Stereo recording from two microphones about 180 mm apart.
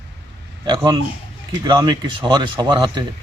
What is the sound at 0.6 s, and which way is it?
Speech, 25° right (ahead or behind).